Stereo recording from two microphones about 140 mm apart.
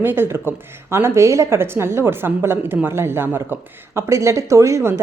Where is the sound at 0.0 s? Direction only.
15° right (ahead or behind).